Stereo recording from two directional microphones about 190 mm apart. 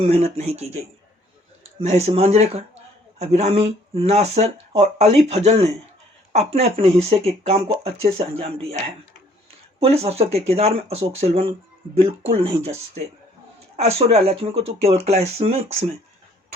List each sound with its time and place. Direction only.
0.0 s speech: 35° right (ahead or behind)
2.0 s speech: 35° right (ahead or behind)
9.8 s speech: 35° right (ahead or behind)